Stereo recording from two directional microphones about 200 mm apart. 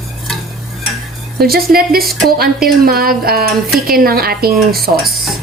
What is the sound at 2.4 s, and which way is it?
A woman's voice, 50° right (ahead or behind).